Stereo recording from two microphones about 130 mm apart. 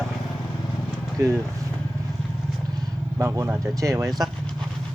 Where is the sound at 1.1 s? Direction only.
25° right (ahead or behind).